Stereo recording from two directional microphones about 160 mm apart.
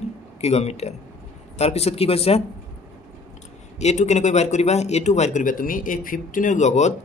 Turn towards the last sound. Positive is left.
turn(degrees=45)  # may be behind; listen again after turning